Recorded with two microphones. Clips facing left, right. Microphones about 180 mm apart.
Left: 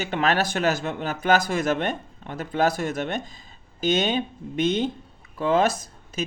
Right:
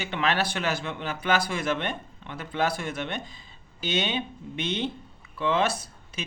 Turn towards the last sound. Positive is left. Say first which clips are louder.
# left 7 dB
turn(degrees=40)  # may be behind; listen again after turning